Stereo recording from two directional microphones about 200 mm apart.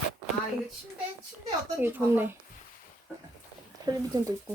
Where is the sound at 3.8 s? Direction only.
15° right (ahead or behind).